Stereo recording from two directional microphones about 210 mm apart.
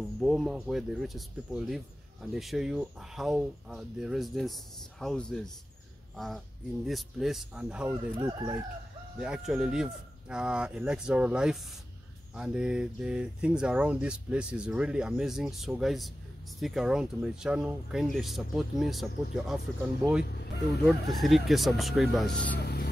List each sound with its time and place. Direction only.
0.2 s speech: centre (ahead or behind)
9.2 s speech: 5° right (ahead or behind)
20.2 s speech: 50° left (ahead or behind)
20.8 s speech: centre (ahead or behind)
22.6 s music: 50° left (ahead or behind)